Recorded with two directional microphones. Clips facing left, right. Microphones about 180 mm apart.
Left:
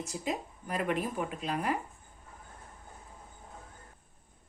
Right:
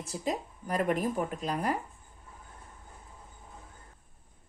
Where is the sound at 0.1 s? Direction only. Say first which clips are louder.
Right 6 dB; 40° right (ahead or behind).